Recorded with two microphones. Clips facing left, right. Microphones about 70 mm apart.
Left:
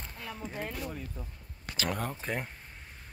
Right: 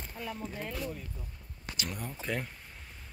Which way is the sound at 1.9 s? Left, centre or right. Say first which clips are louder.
Left 10 dB; left.